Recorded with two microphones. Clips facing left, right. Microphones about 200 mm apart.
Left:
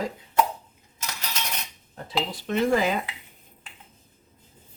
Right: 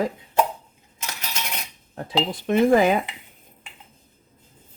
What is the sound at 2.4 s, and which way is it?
Speech, 55° right (ahead or behind).